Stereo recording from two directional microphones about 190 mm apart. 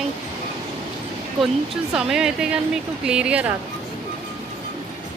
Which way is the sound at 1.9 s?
5° right (ahead or behind).